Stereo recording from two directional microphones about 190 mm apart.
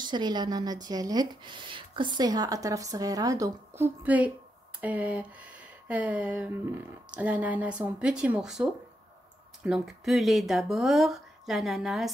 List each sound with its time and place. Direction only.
0.0 s speech: 25° right (ahead or behind); by 12.1 s centre (ahead or behind)